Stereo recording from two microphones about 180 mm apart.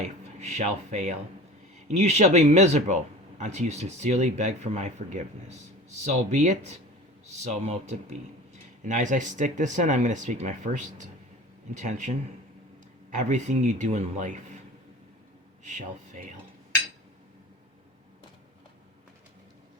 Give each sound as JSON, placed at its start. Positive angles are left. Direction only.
{"t": 0.3, "sound": "speech", "side_deg": -40}
{"t": 6.1, "sound": "speech", "side_deg": -40}